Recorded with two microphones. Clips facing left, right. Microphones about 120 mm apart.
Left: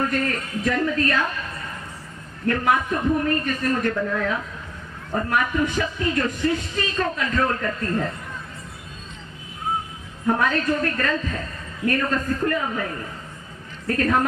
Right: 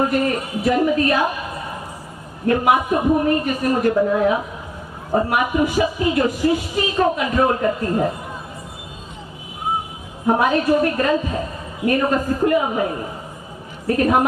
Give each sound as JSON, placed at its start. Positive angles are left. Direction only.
{"t": 0.0, "sound": "a woman's voice", "side_deg": -20}
{"t": 10.2, "sound": "a woman's voice", "side_deg": -20}